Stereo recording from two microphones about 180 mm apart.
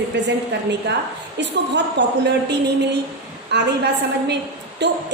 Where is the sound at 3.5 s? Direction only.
70° right (ahead or behind).